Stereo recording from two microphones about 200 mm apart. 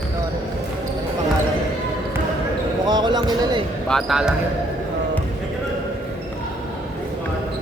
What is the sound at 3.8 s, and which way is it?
Speech, centre (ahead or behind).